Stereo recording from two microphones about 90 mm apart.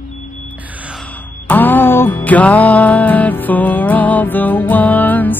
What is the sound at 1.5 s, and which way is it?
Music, 20° left (ahead or behind).